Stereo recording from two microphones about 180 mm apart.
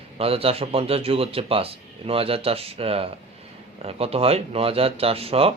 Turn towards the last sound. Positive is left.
turn(degrees=-35)  # may be behind; listen again after turning